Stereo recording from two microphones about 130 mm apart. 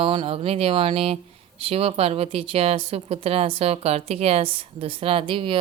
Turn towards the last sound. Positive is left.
turn(degrees=-45)  # may be behind; listen again after turning